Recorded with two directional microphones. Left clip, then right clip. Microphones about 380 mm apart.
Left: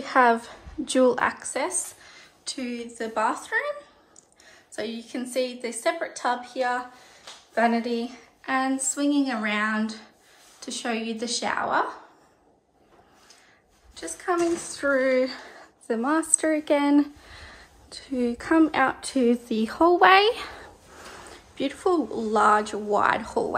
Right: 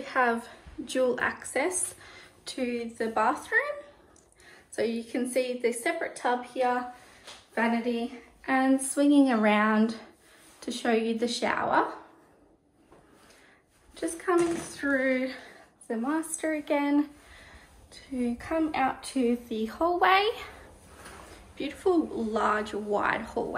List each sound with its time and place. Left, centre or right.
0.0 s a woman's voice: centre
13.9 s speech: centre
15.0 s a woman's voice: centre
21.5 s a woman's voice: centre